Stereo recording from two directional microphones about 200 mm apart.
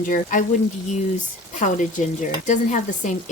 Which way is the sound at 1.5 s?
40° left (ahead or behind).